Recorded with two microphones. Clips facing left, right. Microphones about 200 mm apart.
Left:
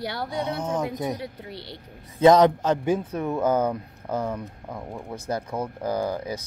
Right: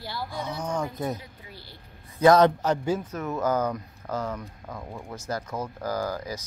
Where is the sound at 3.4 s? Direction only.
30° left (ahead or behind).